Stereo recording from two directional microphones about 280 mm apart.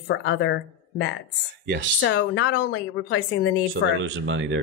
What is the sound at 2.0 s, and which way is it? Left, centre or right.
A woman's voice, left.